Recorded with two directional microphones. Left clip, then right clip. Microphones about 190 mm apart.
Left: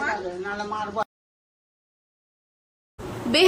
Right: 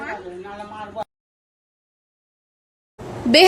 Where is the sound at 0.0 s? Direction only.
Centre (ahead or behind).